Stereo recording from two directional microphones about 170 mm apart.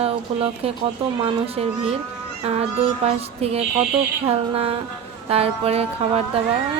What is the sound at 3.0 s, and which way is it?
Speech, 35° right (ahead or behind).